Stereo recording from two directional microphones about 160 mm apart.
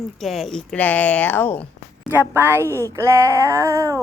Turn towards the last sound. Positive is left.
turn(degrees=-20)  # may be behind; listen again after turning